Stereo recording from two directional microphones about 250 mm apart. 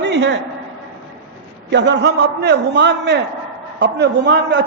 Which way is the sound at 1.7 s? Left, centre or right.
Right.